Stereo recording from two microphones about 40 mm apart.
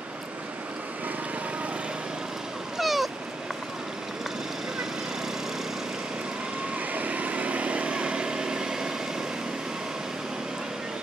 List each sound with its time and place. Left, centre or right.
2.8 s cat: centre
6.9 s vehicle: right; by 8.9 s centre